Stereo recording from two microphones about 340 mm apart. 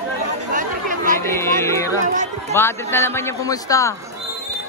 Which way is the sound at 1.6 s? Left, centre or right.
Centre.